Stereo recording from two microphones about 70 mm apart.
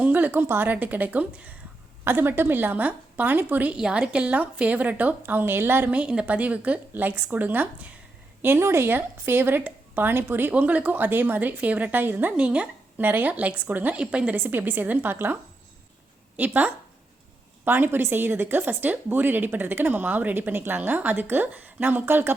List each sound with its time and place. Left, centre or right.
0.0 s a sound: right
0.4 s speech: right
3.8 s speech: centre; by 5.9 s right
5.9 s speech: centre
12.4 s speech: centre
14.3 s speech: right
16.4 s speech: right